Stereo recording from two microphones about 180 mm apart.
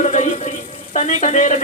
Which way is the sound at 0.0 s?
40° left (ahead or behind).